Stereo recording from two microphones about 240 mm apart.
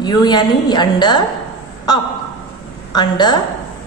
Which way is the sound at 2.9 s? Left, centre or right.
Centre.